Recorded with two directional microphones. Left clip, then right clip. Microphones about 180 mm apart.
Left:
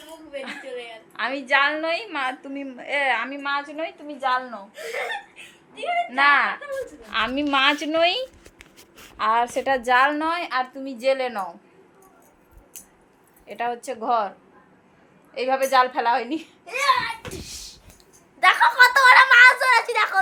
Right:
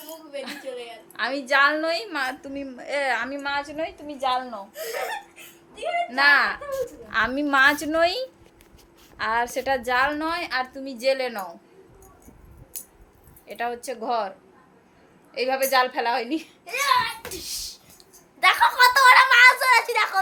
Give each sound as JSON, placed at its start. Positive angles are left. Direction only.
{"t": 0.3, "sound": "a sound", "side_deg": -5}
{"t": 1.1, "sound": "a woman's voice", "side_deg": -10}
{"t": 6.1, "sound": "a woman's voice", "side_deg": -10}
{"t": 9.1, "sound": "a woman's voice", "side_deg": 10}
{"t": 13.5, "sound": "a woman's voice", "side_deg": 10}
{"t": 15.4, "sound": "a woman's voice", "side_deg": 10}
{"t": 16.6, "sound": "a child's voice", "side_deg": -10}
{"t": 18.3, "sound": "a woman's voice", "side_deg": 10}